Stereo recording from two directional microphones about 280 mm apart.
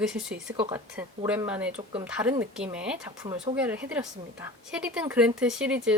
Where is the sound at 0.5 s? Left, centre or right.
Centre.